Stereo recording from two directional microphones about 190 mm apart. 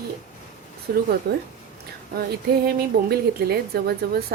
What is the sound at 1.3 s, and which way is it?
Speech, 60° right (ahead or behind).